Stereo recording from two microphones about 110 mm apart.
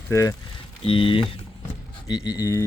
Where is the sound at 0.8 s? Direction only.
55° left (ahead or behind).